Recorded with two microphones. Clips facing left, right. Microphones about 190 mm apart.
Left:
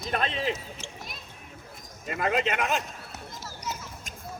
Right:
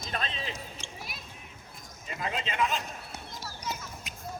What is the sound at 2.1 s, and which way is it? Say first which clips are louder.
Speech: left 8 dB; 60° left (ahead or behind).